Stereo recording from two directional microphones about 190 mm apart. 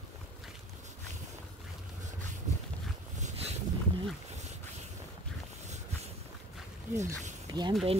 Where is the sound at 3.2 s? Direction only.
40° right (ahead or behind).